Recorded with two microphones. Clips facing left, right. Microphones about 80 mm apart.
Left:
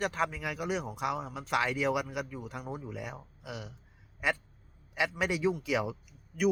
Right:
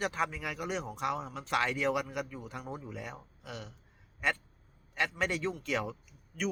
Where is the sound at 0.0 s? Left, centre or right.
Centre.